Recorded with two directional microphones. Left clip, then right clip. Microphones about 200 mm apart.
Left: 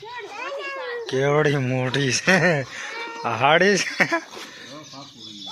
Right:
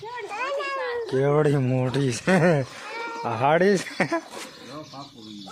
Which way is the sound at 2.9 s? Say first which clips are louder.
Left 2 dB; centre (ahead or behind).